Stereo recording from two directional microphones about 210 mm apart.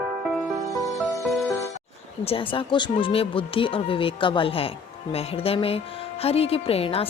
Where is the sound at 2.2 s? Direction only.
25° left (ahead or behind).